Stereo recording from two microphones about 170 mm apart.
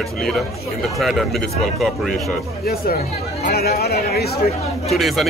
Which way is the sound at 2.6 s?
60° left (ahead or behind).